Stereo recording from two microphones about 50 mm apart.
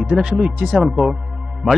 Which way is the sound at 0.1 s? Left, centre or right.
Centre.